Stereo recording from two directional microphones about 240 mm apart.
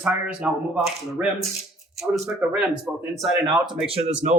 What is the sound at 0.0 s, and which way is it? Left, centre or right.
Speech, centre.